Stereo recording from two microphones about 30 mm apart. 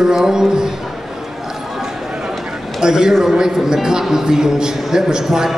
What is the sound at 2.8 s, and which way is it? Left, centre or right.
A man's voice, right.